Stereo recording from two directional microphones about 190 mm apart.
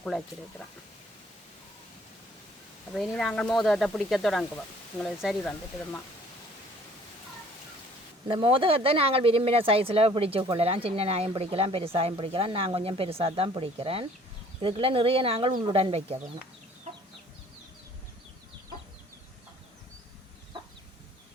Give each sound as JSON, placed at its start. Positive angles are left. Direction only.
{"t": 2.9, "sound": "speech", "side_deg": 0}
{"t": 8.3, "sound": "speech", "side_deg": -30}